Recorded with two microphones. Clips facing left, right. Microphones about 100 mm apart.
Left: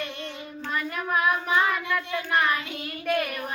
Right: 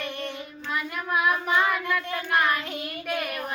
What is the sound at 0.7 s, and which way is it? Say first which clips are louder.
Child singing: left 1 dB; 5° right (ahead or behind).